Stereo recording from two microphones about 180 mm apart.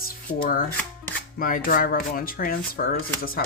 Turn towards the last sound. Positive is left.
turn(degrees=55)  # may be behind; listen again after turning